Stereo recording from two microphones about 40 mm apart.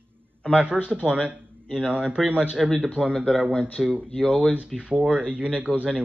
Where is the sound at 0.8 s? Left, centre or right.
Right.